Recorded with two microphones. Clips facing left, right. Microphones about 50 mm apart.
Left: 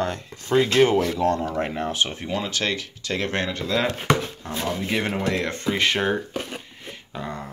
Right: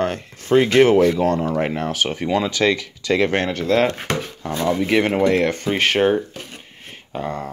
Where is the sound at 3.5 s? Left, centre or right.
Right.